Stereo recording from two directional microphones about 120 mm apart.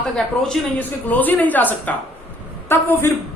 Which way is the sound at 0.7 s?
15° left (ahead or behind).